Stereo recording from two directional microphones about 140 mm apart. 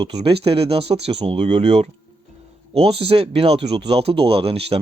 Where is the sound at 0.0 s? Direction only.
40° right (ahead or behind).